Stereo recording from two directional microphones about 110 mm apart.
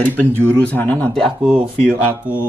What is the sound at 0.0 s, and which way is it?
A man's voice, 15° left (ahead or behind).